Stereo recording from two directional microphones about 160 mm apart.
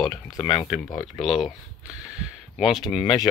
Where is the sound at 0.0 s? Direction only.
25° left (ahead or behind).